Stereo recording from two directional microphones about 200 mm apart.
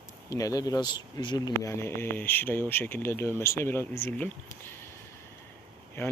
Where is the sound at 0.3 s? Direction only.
15° left (ahead or behind).